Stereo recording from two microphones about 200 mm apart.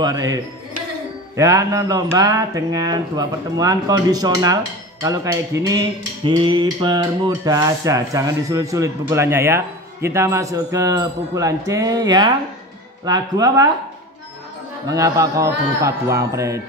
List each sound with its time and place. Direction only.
0.0 s cutlery: 15° right (ahead or behind)
13.0 s speech: 20° right (ahead or behind)
14.9 s cutlery: 15° right (ahead or behind)